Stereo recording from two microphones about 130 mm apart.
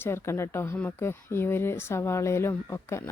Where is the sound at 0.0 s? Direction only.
20° left (ahead or behind).